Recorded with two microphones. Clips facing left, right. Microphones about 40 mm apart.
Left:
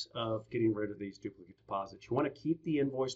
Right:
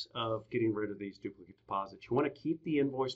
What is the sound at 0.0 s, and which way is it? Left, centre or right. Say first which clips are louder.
Speech: even; centre.